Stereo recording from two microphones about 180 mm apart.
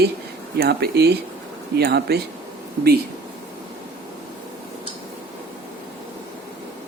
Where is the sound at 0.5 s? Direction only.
60° right (ahead or behind).